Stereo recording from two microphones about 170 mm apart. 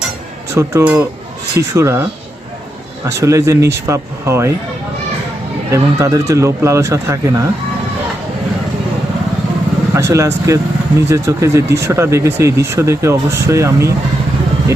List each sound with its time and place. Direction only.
0.5 s speech: 15° right (ahead or behind)
3.1 s speech: 15° right (ahead or behind)
5.7 s speech: 15° right (ahead or behind)
9.9 s speech: 20° right (ahead or behind)